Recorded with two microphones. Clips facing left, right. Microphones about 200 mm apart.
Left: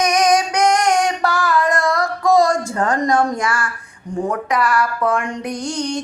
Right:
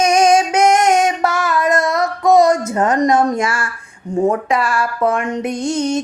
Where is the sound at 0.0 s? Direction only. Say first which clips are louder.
Right 3 dB; 25° right (ahead or behind).